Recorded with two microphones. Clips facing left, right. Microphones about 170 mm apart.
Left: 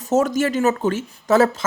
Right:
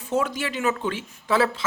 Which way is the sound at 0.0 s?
40° left (ahead or behind).